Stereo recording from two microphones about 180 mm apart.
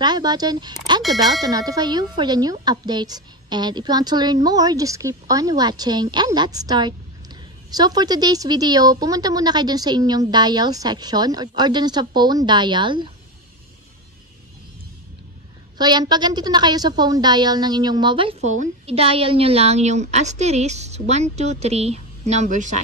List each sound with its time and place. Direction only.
0.0 s a woman's voice: 25° right (ahead or behind)
15.8 s a woman's voice: 25° right (ahead or behind); by 22.8 s 45° right (ahead or behind)